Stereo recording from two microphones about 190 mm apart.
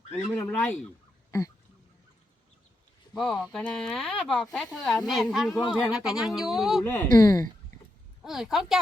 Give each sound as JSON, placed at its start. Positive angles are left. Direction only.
{"t": 0.3, "sound": "speech", "side_deg": 10}
{"t": 3.2, "sound": "speech", "side_deg": 0}
{"t": 6.8, "sound": "speech", "side_deg": 10}
{"t": 8.2, "sound": "speech", "side_deg": 0}